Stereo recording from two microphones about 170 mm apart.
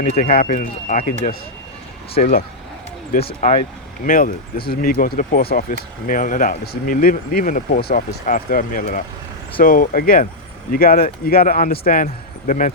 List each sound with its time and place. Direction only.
0.0 s speech: 55° left (ahead or behind)
4.0 s speech: 55° left (ahead or behind)